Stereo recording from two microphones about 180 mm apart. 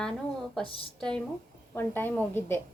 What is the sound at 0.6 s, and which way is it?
Speech, 30° left (ahead or behind).